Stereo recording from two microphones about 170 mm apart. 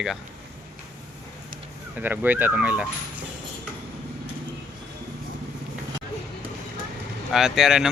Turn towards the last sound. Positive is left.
turn(degrees=0)  # may be behind; listen again after turning